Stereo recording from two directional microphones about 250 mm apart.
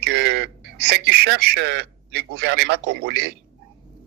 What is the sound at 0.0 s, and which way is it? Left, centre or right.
A man's voice, right.